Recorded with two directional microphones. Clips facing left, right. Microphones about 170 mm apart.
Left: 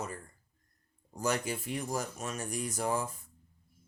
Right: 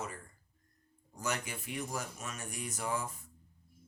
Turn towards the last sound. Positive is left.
turn(degrees=40)  # may be behind; listen again after turning